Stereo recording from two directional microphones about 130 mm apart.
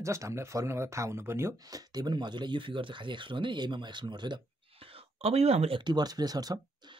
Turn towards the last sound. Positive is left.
turn(degrees=-30)  # may be behind; listen again after turning